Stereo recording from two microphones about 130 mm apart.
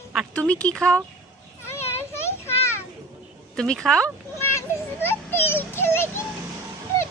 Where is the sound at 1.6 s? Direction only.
20° left (ahead or behind).